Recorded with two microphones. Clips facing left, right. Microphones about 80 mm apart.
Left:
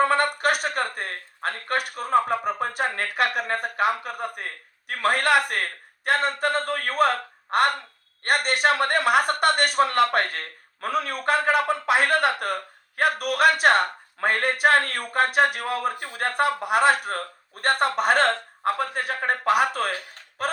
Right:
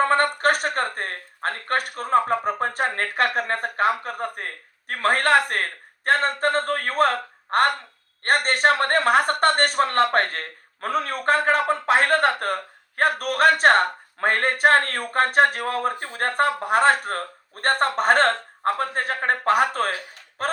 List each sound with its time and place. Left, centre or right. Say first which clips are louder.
0.0 s a man's voice: right 2 dB; right
8.2 s a man's voice: right 2 dB; right